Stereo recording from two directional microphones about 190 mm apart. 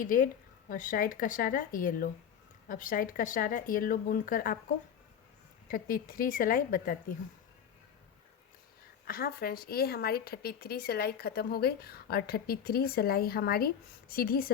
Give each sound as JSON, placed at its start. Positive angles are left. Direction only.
{"t": 0.0, "sound": "a woman's voice", "side_deg": 45}
{"t": 5.6, "sound": "a woman's voice", "side_deg": 50}
{"t": 9.0, "sound": "a woman's voice", "side_deg": 50}